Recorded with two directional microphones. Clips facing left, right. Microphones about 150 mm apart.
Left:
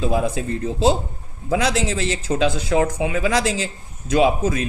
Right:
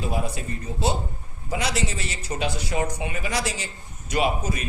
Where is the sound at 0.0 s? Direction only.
90° left.